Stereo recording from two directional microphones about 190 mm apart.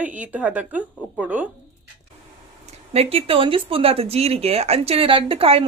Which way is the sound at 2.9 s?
30° right (ahead or behind).